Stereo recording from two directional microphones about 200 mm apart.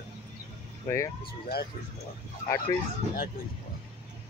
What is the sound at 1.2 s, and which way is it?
Speech, 50° left (ahead or behind).